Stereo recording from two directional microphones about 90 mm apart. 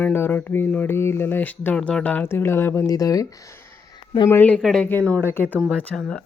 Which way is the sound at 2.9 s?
40° left (ahead or behind).